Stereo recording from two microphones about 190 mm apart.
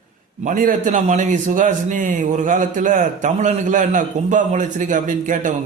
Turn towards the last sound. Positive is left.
turn(degrees=-45)  # may be behind; listen again after turning